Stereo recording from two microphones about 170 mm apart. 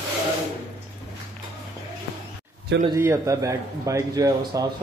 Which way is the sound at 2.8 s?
15° right (ahead or behind).